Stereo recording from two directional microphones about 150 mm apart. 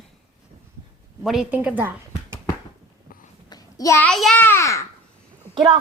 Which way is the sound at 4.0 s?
5° left (ahead or behind).